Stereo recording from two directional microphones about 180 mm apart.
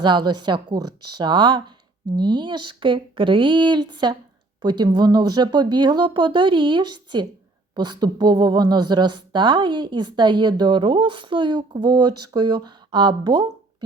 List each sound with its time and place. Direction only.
0.0 s speech: 25° right (ahead or behind)